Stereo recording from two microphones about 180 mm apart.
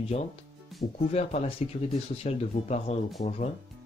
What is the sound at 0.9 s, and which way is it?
Speech, 35° left (ahead or behind).